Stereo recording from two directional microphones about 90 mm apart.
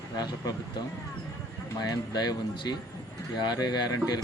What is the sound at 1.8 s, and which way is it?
Speech, 50° left (ahead or behind).